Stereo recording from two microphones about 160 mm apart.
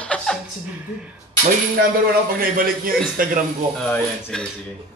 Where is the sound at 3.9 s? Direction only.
10° left (ahead or behind).